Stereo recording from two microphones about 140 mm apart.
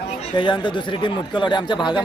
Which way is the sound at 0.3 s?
35° left (ahead or behind).